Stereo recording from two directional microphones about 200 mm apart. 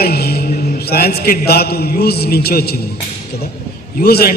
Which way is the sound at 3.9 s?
50° left (ahead or behind).